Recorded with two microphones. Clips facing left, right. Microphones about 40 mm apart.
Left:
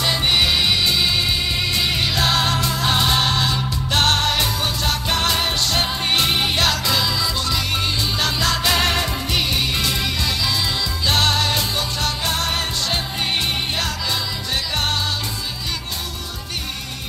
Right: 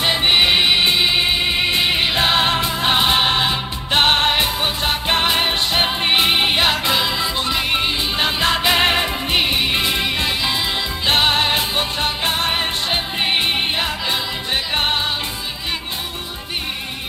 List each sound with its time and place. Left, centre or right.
0.0 s music: right